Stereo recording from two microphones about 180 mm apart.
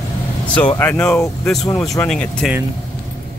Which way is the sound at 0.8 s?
5° left (ahead or behind).